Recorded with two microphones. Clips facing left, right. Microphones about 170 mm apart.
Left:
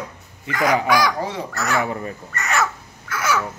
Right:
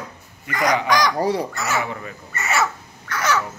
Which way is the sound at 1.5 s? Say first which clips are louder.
Left 1 dB; centre (ahead or behind).